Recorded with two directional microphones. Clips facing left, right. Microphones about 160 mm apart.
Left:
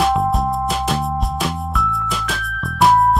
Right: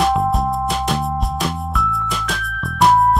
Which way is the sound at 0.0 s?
Centre (ahead or behind).